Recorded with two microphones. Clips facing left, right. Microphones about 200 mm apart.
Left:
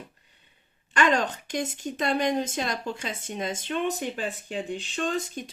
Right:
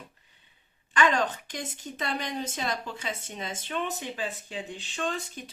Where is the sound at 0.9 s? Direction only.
45° left (ahead or behind).